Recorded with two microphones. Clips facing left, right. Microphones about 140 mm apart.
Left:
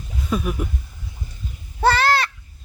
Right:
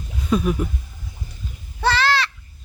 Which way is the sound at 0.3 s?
5° left (ahead or behind).